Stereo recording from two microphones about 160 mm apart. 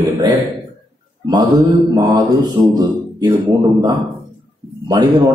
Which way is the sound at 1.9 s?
25° right (ahead or behind).